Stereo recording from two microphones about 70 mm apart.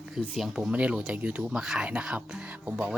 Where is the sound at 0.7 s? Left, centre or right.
Centre.